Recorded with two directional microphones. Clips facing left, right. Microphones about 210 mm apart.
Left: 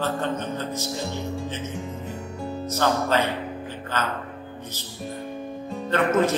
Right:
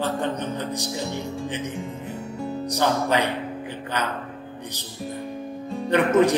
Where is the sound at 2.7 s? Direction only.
15° right (ahead or behind).